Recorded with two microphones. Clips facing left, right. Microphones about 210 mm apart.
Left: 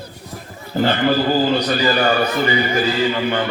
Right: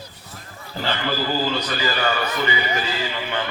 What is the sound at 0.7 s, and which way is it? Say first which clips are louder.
A man's voice: left 9 dB; 50° left (ahead or behind).